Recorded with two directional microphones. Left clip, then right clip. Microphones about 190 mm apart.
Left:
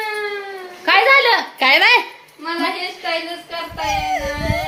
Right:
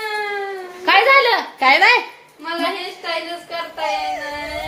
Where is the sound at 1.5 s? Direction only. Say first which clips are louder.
Right 1 dB; 40° left (ahead or behind).